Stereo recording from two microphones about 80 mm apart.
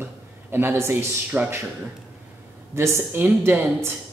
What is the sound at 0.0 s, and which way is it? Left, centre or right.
A man's voice, right.